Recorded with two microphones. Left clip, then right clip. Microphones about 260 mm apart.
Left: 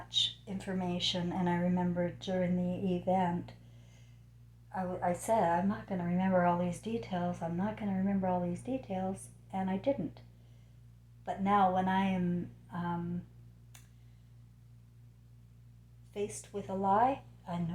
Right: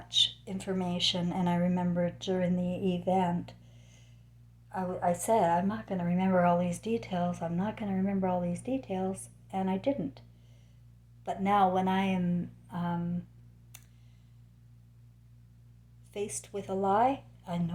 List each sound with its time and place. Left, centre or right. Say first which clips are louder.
0.1 s a woman's voice: right 5 dB; right
4.7 s a woman's voice: right 3 dB; right
11.3 s a woman's voice: right 2 dB; right
12.6 s a sound: right 2 dB; right
16.1 s a woman's voice: right 2 dB; right